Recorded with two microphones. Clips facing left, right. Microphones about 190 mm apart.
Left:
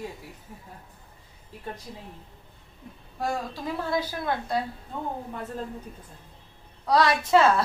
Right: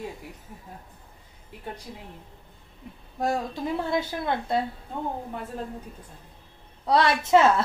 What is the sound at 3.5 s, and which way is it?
Speech, 25° right (ahead or behind).